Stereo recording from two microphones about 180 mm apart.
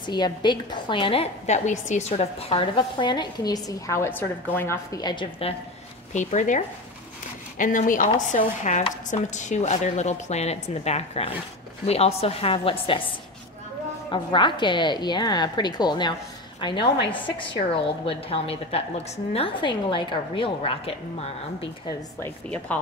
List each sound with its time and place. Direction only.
0.0 s a woman's voice: 25° left (ahead or behind)
6.1 s a woman's voice: 45° left (ahead or behind)
14.1 s a woman's voice: 25° left (ahead or behind)
16.7 s a woman's voice: 70° left (ahead or behind)
17.4 s a woman's voice: 30° left (ahead or behind)
22.2 s a woman's voice: 10° left (ahead or behind)